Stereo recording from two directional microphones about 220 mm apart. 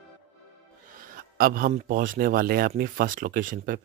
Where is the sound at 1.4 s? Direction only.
40° right (ahead or behind).